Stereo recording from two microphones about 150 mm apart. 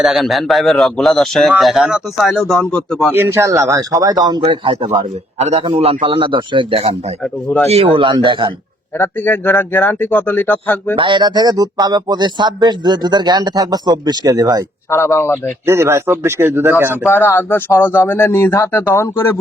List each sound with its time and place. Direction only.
0.0 s speech: centre (ahead or behind)
3.1 s a man's voice: 15° right (ahead or behind); by 4.9 s 35° right (ahead or behind)
5.4 s a man's voice: 45° right (ahead or behind)
9.0 s speech: 15° left (ahead or behind)
10.9 s a man's voice: 35° right (ahead or behind)
14.8 s speech: 15° left (ahead or behind)
15.6 s speech: 15° right (ahead or behind)
17.1 s speech: 15° left (ahead or behind)